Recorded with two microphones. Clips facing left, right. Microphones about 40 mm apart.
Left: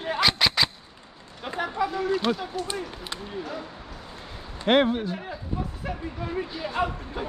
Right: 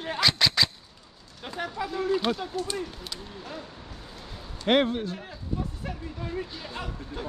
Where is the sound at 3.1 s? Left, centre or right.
Left.